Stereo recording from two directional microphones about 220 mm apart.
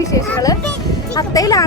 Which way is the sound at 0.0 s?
15° left (ahead or behind).